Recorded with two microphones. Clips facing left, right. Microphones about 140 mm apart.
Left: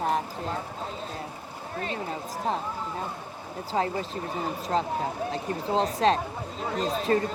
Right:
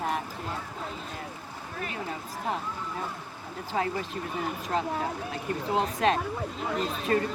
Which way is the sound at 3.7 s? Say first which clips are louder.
Left 2 dB; 30° left (ahead or behind).